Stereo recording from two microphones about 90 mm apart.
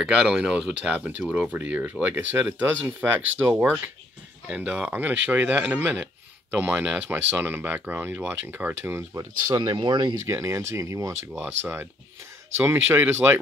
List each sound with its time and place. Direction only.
0.0 s speech: 10° right (ahead or behind); by 9.3 s 30° right (ahead or behind)
9.5 s speech: 55° right (ahead or behind)
10.2 s speech: 35° right (ahead or behind)
11.4 s speech: 25° right (ahead or behind)